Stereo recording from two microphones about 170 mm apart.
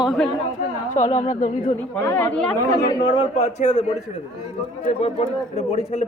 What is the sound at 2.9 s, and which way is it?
Speech, 30° left (ahead or behind).